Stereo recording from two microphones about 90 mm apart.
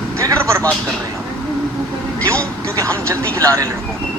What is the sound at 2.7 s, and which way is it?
Speech, 35° right (ahead or behind).